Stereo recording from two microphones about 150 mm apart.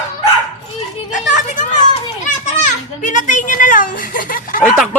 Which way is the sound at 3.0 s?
55° left (ahead or behind).